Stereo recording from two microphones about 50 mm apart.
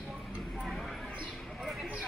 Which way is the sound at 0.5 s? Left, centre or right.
Centre.